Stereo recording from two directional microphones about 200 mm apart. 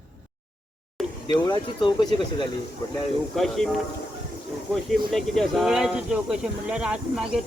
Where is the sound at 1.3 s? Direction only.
20° left (ahead or behind).